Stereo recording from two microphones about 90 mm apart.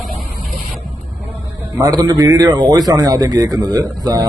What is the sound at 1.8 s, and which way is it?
A man's voice, 45° right (ahead or behind).